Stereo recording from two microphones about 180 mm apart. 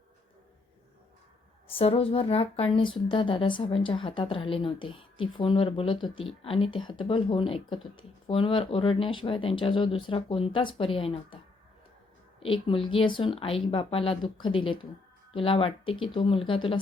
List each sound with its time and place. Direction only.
1.6 s speech: 30° left (ahead or behind)
12.4 s speech: 30° left (ahead or behind)